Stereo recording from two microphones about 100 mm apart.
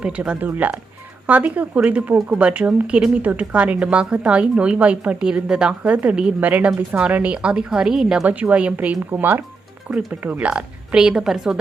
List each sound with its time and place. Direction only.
0.0 s a woman's voice: 10° right (ahead or behind)
2.5 s a woman's voice: 15° right (ahead or behind)